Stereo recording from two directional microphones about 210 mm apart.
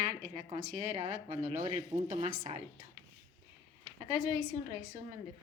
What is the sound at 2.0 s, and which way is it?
Speech, 35° right (ahead or behind).